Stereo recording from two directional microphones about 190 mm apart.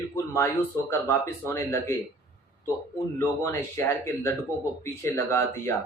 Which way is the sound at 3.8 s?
10° left (ahead or behind).